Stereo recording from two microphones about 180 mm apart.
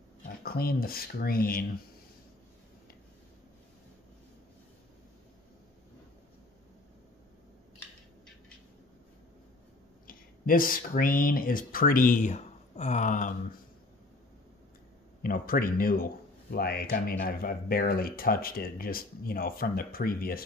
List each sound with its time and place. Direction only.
0.2 s speech: 55° left (ahead or behind)
10.0 s speech: 50° left (ahead or behind)
15.2 s speech: 50° left (ahead or behind)